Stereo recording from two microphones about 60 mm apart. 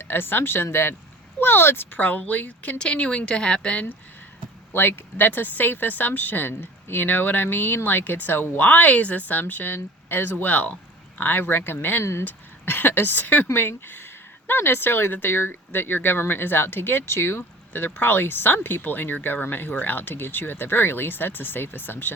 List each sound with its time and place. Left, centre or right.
0.0 s speech: left
2.7 s a woman's voice: centre
4.7 s speech: left